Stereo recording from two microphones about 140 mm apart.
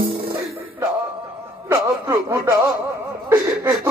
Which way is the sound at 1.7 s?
20° right (ahead or behind).